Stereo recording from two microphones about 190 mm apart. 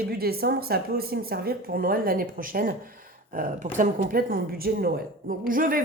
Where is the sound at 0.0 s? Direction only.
55° right (ahead or behind).